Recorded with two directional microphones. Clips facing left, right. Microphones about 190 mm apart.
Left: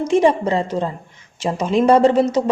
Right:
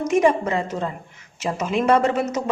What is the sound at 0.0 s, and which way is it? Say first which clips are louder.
A woman's voice: left 3 dB; 30° left (ahead or behind).